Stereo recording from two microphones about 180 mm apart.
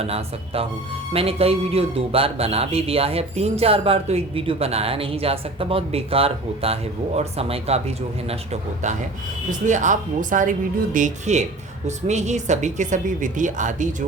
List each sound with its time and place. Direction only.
0.0 s a man's voice: 35° right (ahead or behind)
9.6 s a woman's voice: 45° right (ahead or behind)